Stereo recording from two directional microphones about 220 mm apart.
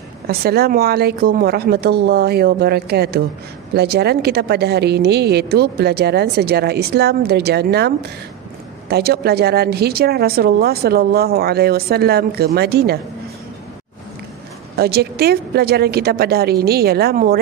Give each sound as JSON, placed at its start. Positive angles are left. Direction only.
{"t": 0.3, "sound": "a woman's voice", "side_deg": -45}
{"t": 14.8, "sound": "a woman's voice", "side_deg": -45}